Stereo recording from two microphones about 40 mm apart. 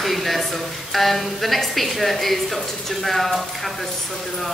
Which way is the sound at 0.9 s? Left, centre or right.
Centre.